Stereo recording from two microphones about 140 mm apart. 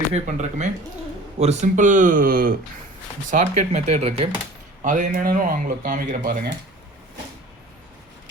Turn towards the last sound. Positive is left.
turn(degrees=-80)